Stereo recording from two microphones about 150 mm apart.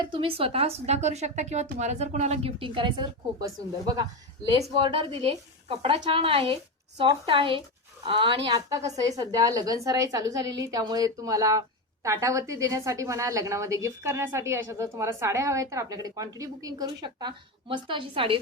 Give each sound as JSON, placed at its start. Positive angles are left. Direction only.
{"t": 0.0, "sound": "a woman's voice", "side_deg": -35}
{"t": 4.6, "sound": "a woman's voice", "side_deg": -35}